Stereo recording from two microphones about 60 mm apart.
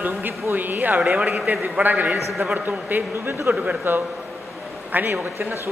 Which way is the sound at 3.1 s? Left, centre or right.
Right.